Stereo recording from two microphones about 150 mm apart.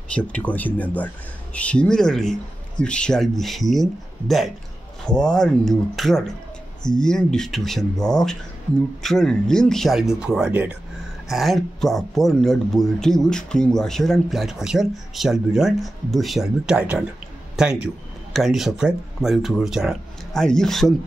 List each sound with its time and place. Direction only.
0.1 s speech: 10° left (ahead or behind)